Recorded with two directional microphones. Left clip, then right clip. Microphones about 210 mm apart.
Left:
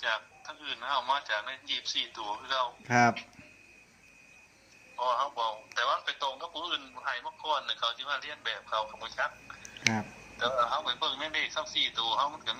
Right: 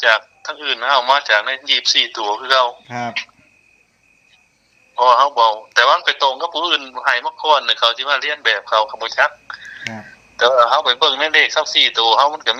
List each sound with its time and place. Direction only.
0.0 s a man's voice: 50° right (ahead or behind)
2.8 s speech: 20° left (ahead or behind)
4.9 s a man's voice: 50° right (ahead or behind)